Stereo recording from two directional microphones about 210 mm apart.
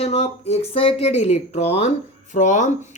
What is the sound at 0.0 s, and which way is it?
Speech, 30° left (ahead or behind).